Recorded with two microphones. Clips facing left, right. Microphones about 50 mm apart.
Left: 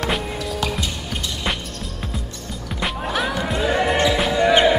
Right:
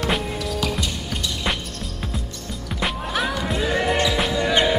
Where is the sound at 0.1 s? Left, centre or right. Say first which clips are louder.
Even; centre.